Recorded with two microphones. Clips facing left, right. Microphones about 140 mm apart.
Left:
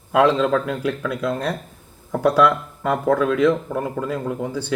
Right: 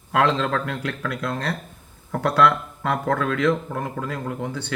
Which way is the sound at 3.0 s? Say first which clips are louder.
Left 6 dB; 15° left (ahead or behind).